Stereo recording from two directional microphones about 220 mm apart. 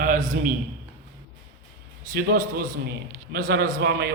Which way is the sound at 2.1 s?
45° right (ahead or behind).